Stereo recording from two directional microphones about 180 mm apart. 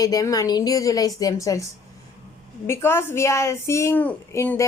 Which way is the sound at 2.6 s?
15° left (ahead or behind).